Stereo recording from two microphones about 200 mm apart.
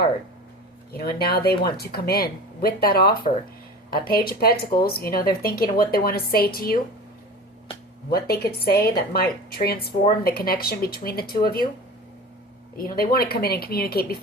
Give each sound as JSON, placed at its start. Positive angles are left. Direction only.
{"t": 0.9, "sound": "speech", "side_deg": 50}
{"t": 8.1, "sound": "speech", "side_deg": 50}
{"t": 12.7, "sound": "speech", "side_deg": 45}